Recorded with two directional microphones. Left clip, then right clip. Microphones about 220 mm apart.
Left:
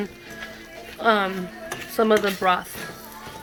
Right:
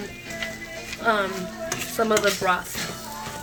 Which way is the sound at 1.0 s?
40° left (ahead or behind).